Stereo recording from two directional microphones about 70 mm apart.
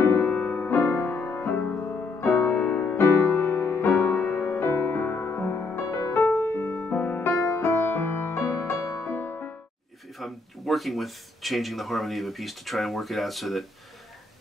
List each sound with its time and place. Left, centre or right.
0.0 s music: left
10.1 s speech: centre